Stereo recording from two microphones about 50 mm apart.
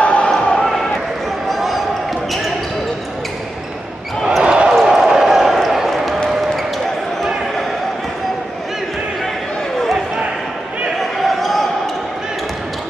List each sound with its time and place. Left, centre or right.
0.0 s basketball bounce: left
0.6 s basketball bounce: centre
4.4 s basketball bounce: right; by 6.6 s centre
9.8 s basketball bounce: centre